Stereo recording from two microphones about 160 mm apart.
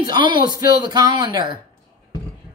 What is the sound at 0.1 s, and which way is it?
Speech, 30° right (ahead or behind).